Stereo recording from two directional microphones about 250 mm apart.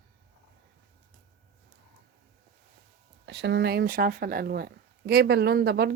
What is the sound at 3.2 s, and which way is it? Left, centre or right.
Speech, right.